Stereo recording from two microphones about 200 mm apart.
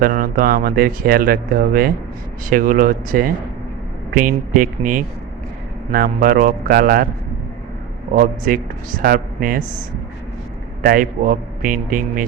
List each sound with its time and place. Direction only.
0.0 s speech: 45° right (ahead or behind)
8.1 s speech: 45° right (ahead or behind)
10.8 s speech: 45° right (ahead or behind)